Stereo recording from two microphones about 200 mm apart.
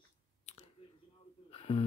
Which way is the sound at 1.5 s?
30° left (ahead or behind).